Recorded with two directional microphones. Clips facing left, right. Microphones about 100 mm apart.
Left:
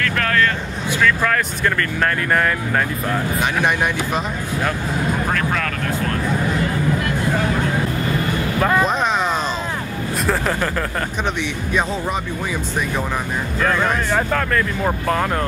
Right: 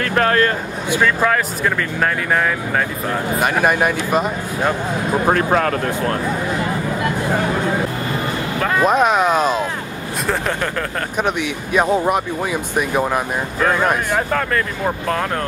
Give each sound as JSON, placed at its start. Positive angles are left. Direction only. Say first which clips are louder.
{"t": 0.0, "sound": "a sound", "louder": "right 3 dB", "side_deg": -30}
{"t": 0.9, "sound": "speech", "louder": "right 2 dB", "side_deg": -15}
{"t": 1.6, "sound": "speech", "louder": "right 1 dB", "side_deg": -5}
{"t": 5.2, "sound": "speech", "louder": "right 6 dB", "side_deg": -35}
{"t": 8.5, "sound": "speech", "louder": "left 2 dB", "side_deg": 10}
{"t": 8.8, "sound": "speech", "louder": "right 5 dB", "side_deg": -5}
{"t": 13.1, "sound": "speech", "louder": "right 3 dB", "side_deg": -10}